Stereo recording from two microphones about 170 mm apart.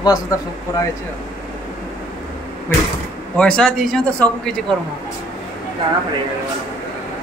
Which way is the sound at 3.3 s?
5° left (ahead or behind).